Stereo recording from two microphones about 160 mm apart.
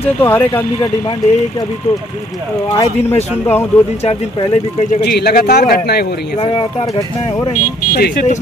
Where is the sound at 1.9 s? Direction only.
45° left (ahead or behind).